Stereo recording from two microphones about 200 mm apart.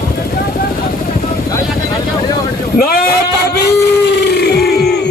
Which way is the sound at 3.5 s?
55° left (ahead or behind).